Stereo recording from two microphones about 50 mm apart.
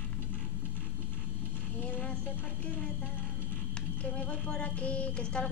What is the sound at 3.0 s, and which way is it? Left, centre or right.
Music, left.